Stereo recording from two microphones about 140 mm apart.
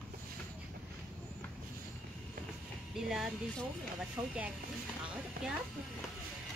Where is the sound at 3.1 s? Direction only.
5° right (ahead or behind).